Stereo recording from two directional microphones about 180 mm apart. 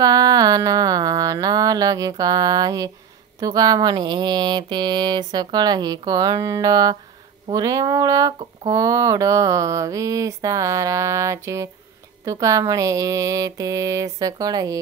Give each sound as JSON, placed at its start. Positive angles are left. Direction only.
{"t": 0.0, "sound": "mantra", "side_deg": -20}